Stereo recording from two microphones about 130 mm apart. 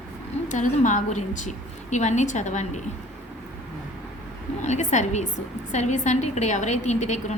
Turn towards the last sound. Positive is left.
turn(degrees=65)  # may be behind; listen again after turning